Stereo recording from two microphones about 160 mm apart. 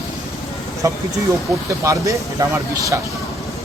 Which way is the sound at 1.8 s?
20° right (ahead or behind).